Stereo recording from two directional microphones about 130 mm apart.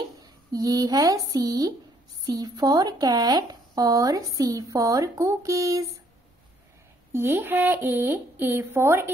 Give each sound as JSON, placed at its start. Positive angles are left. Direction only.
{"t": 0.2, "sound": "speech", "side_deg": -30}
{"t": 7.1, "sound": "speech", "side_deg": -20}